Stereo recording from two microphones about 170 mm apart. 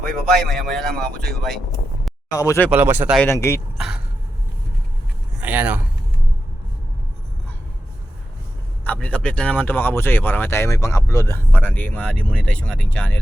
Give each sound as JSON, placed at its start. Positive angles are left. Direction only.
{"t": 0.3, "sound": "speech", "side_deg": 0}
{"t": 2.3, "sound": "speech", "side_deg": 20}
{"t": 2.6, "sound": "speech", "side_deg": -10}
{"t": 3.2, "sound": "speech", "side_deg": 15}
{"t": 5.4, "sound": "speech", "side_deg": -10}
{"t": 8.8, "sound": "speech", "side_deg": 10}